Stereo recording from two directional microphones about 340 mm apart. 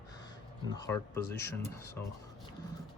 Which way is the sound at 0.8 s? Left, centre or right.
Centre.